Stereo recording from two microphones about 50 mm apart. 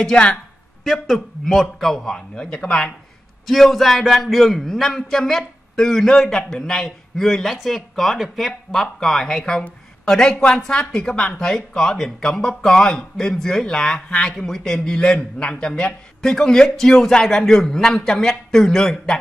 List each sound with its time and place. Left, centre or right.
0.0 s a woman's voice: centre
0.8 s speech: centre
3.4 s speech: centre